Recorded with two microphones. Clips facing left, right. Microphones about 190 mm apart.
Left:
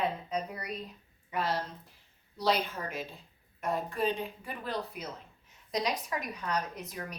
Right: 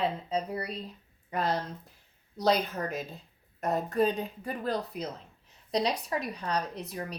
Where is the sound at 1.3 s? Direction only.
40° right (ahead or behind).